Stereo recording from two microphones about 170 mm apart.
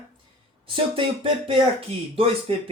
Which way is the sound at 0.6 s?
30° right (ahead or behind).